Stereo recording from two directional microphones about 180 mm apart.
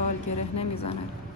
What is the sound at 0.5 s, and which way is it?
Speech, 35° left (ahead or behind).